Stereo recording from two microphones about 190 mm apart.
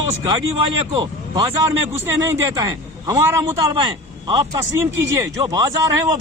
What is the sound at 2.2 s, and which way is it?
A man's voice, 15° right (ahead or behind).